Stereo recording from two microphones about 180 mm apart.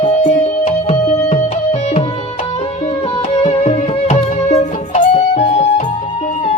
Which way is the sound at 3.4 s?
35° left (ahead or behind).